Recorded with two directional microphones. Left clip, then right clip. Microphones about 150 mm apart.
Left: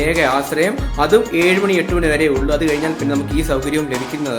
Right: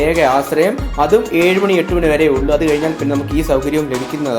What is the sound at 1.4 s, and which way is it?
Speech, centre (ahead or behind).